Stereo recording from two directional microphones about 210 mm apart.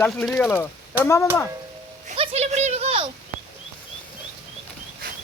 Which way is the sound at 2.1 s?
30° right (ahead or behind).